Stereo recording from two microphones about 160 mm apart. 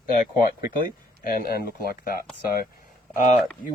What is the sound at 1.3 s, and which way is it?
Speech, 70° left (ahead or behind).